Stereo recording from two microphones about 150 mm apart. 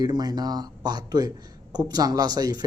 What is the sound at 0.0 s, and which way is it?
Speech, 25° right (ahead or behind).